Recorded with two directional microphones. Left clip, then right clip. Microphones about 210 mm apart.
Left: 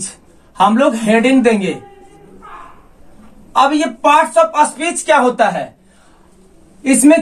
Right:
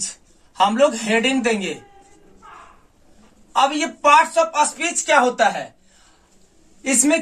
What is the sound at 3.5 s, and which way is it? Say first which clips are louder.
A woman's voice: left 6 dB; 20° left (ahead or behind).